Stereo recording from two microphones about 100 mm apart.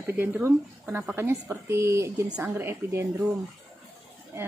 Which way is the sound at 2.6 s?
25° right (ahead or behind).